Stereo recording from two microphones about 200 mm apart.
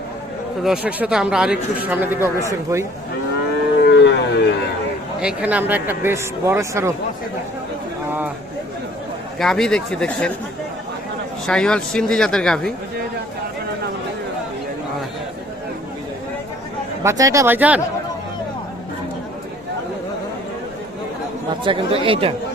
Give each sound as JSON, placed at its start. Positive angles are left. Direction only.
{"t": 0.6, "sound": "a man's voice", "side_deg": -5}
{"t": 3.8, "sound": "a sound", "side_deg": 60}
{"t": 5.2, "sound": "a man's voice", "side_deg": -5}
{"t": 9.4, "sound": "a man's voice", "side_deg": 0}
{"t": 11.4, "sound": "a man's voice", "side_deg": 5}
{"t": 17.0, "sound": "a man's voice", "side_deg": -15}
{"t": 21.6, "sound": "speech", "side_deg": -25}